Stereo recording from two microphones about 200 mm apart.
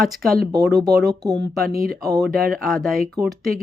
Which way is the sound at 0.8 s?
20° right (ahead or behind).